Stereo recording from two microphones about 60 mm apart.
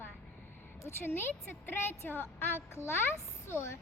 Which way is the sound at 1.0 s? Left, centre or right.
Left.